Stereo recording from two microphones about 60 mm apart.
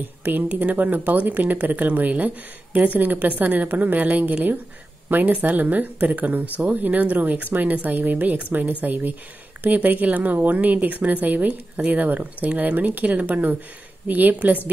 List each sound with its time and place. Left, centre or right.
0.2 s speech: right